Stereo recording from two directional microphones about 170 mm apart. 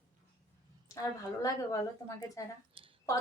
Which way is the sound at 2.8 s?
30° right (ahead or behind).